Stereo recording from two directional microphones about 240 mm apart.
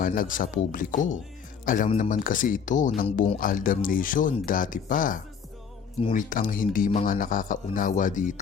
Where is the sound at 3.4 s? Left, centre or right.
Left.